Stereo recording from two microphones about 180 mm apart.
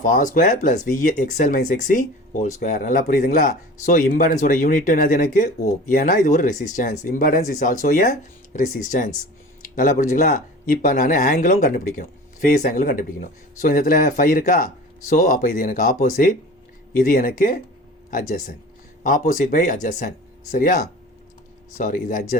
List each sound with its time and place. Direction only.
0.0 s speech: 45° left (ahead or behind)
19.0 s speech: 45° left (ahead or behind)
21.8 s speech: 45° left (ahead or behind)